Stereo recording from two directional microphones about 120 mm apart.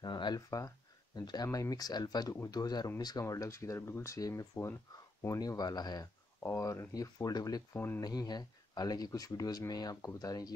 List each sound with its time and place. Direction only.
0.0 s a sound: 35° left (ahead or behind)
1.2 s speech: 35° left (ahead or behind)
6.4 s speech: 25° left (ahead or behind)
7.7 s speech: 15° left (ahead or behind)
8.0 s speech: 35° left (ahead or behind)